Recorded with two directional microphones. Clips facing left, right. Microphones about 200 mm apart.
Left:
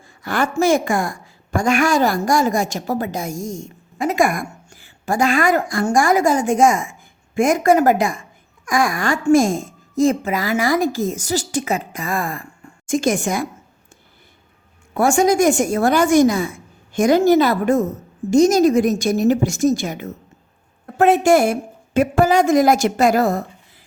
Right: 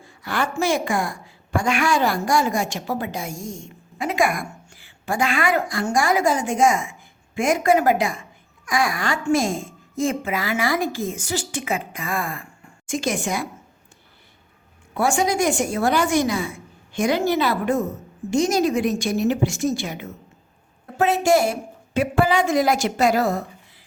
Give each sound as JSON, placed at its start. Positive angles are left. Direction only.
{"t": 0.0, "sound": "a woman's voice", "side_deg": 45}
{"t": 14.9, "sound": "a woman's voice", "side_deg": 45}